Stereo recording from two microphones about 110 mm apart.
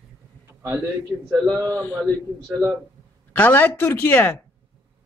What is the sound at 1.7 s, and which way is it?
Speech, 15° left (ahead or behind).